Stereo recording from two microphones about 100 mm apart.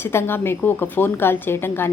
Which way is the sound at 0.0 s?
25° left (ahead or behind).